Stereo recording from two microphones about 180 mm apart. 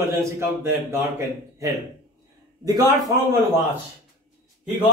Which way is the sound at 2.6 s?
20° right (ahead or behind).